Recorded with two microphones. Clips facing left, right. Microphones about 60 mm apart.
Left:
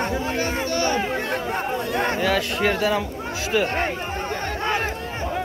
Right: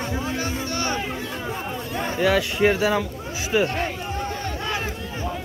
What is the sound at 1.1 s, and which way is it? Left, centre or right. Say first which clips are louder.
Speech: left 5 dB; left.